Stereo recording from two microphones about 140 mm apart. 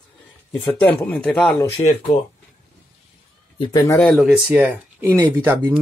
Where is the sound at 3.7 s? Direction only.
25° left (ahead or behind).